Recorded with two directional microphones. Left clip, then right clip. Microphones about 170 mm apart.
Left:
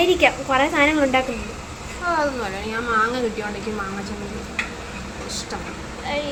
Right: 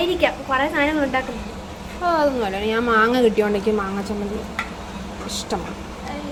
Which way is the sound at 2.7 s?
50° right (ahead or behind).